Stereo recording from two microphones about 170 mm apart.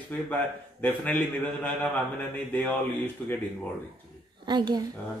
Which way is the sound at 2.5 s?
10° left (ahead or behind).